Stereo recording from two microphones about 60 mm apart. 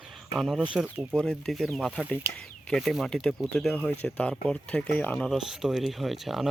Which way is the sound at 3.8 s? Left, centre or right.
Left.